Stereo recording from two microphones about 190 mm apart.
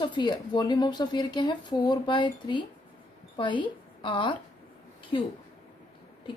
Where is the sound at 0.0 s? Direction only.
25° left (ahead or behind).